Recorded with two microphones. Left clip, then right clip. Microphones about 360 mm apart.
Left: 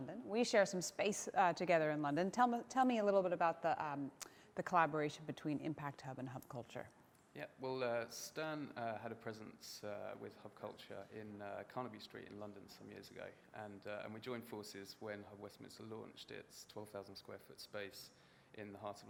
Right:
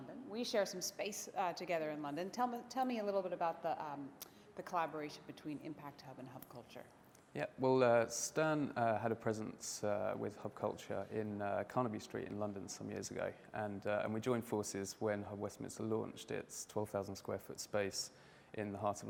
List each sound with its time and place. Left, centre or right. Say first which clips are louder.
0.3 s a woman's voice: left 3 dB; left
7.3 s speech: right 10 dB; right